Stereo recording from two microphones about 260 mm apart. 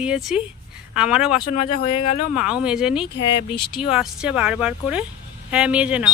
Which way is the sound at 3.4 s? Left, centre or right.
Centre.